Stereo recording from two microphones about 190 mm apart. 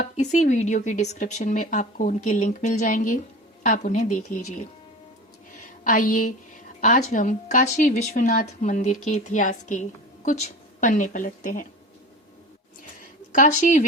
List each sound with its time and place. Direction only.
0.0 s speech: 35° left (ahead or behind)
5.8 s a woman's voice: 45° left (ahead or behind)
13.0 s a sound: 45° left (ahead or behind)